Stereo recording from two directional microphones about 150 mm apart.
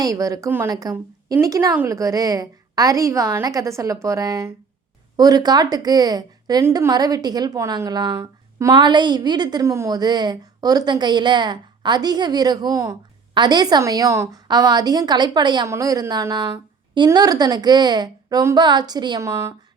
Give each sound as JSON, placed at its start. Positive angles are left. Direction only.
{"t": 0.0, "sound": "a woman's voice", "side_deg": -20}